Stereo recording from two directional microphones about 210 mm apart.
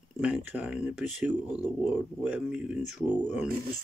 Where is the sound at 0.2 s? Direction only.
5° right (ahead or behind).